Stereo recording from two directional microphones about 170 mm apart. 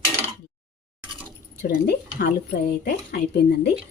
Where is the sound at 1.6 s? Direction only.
65° left (ahead or behind).